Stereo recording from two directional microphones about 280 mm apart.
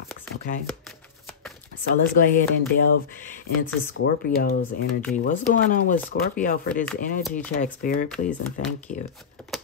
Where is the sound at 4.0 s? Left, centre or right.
Left.